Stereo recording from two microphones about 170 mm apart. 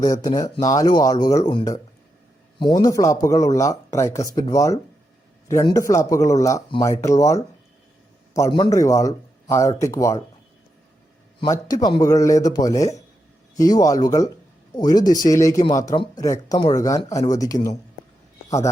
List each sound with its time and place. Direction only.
0.0 s speech: 25° left (ahead or behind)
11.3 s speech: 25° left (ahead or behind)